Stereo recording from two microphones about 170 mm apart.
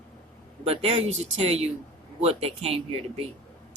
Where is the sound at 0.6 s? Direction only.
35° right (ahead or behind).